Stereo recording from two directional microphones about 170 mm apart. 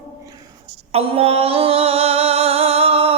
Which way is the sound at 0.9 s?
35° right (ahead or behind).